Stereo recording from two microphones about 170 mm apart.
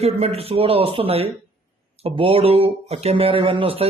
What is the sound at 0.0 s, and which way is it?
Speech, 35° right (ahead or behind).